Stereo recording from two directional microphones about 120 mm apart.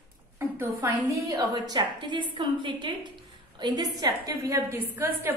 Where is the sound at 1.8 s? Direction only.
45° right (ahead or behind).